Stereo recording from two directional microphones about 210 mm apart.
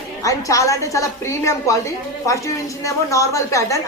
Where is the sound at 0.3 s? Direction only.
15° left (ahead or behind).